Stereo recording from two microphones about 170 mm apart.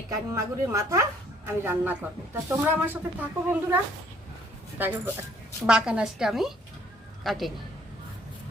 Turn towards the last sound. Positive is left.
turn(degrees=0)  # may be behind; listen again after turning